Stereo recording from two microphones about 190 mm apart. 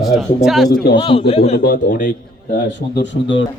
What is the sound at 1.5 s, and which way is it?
Speech, 50° left (ahead or behind).